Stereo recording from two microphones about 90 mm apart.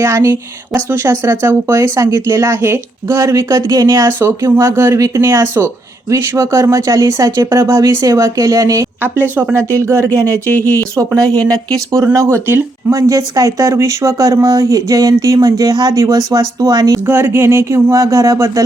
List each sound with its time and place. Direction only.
0.0 s speech: 30° right (ahead or behind)
9.0 s speech: 20° right (ahead or behind)
10.1 s speech: 15° left (ahead or behind)
10.8 s speech: 30° right (ahead or behind)
17.1 s speech: 25° right (ahead or behind)